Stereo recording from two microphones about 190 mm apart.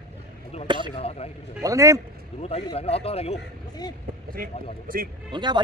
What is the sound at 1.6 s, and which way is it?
Speech, 15° right (ahead or behind).